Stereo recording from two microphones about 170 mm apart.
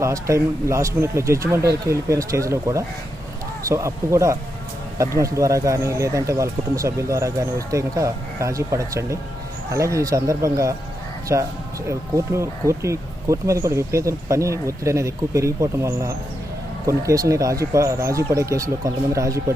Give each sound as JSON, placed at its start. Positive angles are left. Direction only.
{"t": 0.0, "sound": "speech", "side_deg": -15}